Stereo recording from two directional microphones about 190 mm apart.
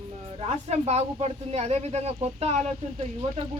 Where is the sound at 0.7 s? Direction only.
35° right (ahead or behind).